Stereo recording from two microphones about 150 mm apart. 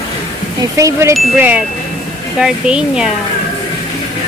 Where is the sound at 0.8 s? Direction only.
20° right (ahead or behind).